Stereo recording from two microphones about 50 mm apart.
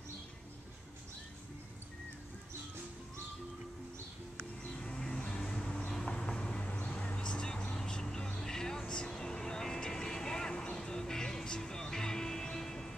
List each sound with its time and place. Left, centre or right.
4.7 s vehicle: centre